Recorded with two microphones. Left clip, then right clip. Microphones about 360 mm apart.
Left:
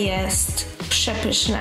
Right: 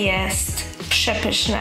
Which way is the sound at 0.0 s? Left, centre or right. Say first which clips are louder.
Right 3 dB; centre.